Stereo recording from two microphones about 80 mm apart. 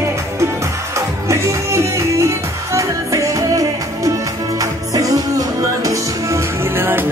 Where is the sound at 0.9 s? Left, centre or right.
Right.